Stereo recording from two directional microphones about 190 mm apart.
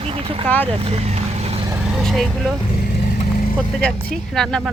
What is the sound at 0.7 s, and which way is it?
Vehicle, 30° right (ahead or behind).